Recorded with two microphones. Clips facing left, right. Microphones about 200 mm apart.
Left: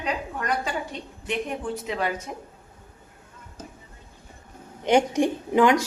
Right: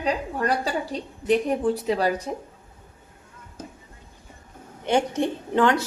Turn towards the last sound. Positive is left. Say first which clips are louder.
# left 2 dB
turn(degrees=10)  # may be behind; listen again after turning